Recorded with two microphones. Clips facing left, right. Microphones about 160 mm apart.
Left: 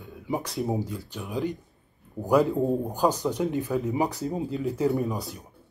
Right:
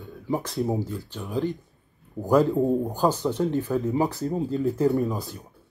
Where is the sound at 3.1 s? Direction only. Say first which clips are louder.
Right 2 dB; 10° left (ahead or behind).